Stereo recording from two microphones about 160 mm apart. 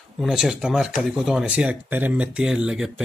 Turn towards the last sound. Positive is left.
turn(degrees=-5)  # may be behind; listen again after turning